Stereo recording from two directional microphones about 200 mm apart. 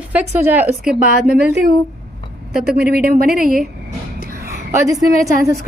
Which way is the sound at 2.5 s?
50° right (ahead or behind).